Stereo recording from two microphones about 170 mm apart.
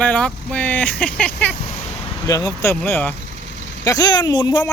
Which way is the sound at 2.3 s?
25° left (ahead or behind).